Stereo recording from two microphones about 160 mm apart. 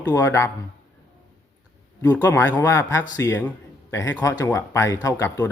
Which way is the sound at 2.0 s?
15° left (ahead or behind).